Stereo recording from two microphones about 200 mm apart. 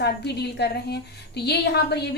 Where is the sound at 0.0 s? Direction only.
55° left (ahead or behind).